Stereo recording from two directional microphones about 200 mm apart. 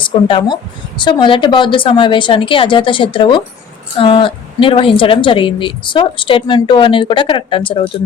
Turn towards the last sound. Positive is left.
turn(degrees=25)  # may be behind; listen again after turning